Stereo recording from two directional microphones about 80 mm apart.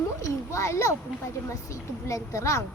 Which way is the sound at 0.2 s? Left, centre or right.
Left.